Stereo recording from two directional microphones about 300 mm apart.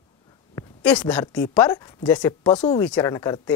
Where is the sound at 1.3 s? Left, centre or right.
Centre.